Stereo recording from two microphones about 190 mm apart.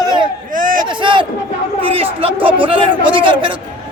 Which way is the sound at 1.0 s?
25° right (ahead or behind).